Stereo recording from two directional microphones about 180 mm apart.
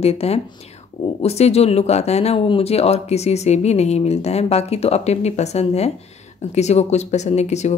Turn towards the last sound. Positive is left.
turn(degrees=40)  # may be behind; listen again after turning